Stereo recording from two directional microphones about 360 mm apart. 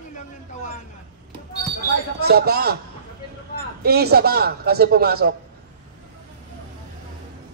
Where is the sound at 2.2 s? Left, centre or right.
Right.